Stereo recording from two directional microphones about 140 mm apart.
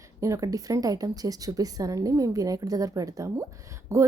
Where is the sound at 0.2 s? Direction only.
25° right (ahead or behind).